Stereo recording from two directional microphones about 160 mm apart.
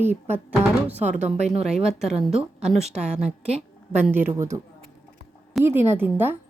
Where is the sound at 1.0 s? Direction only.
45° right (ahead or behind).